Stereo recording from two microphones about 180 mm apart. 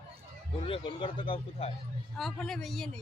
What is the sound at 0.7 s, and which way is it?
Speech, 30° left (ahead or behind).